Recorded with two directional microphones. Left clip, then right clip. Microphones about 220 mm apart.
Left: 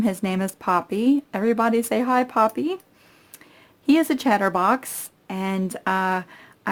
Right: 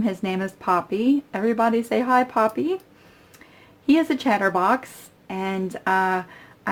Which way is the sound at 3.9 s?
40° left (ahead or behind).